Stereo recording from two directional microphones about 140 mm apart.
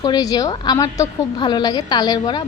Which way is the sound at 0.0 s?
30° left (ahead or behind).